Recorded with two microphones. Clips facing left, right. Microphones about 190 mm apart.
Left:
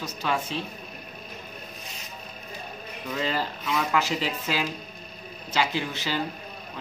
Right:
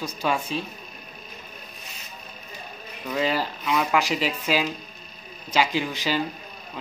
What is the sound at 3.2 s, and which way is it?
Speech, 10° right (ahead or behind).